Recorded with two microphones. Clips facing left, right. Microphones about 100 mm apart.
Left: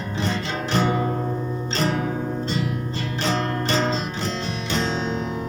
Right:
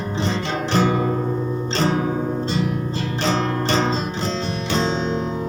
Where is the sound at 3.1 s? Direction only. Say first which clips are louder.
Right 2 dB; 30° right (ahead or behind).